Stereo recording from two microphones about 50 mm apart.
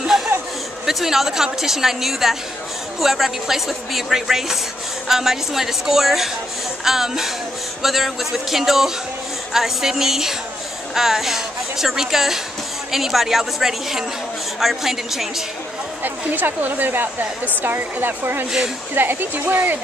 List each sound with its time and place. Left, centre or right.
0.0 s a sound: centre
0.8 s a woman's voice: centre
16.0 s speech: right